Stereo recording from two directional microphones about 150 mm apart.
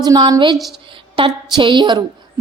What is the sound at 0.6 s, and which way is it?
Speech, centre (ahead or behind).